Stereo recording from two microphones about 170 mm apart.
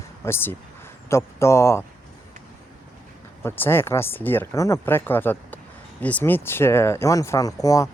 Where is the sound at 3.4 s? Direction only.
15° left (ahead or behind).